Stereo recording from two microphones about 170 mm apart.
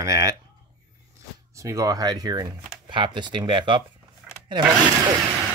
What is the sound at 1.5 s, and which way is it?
Speech, 20° right (ahead or behind).